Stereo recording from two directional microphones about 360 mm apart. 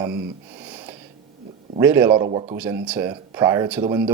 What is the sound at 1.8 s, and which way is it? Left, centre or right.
Speech, centre.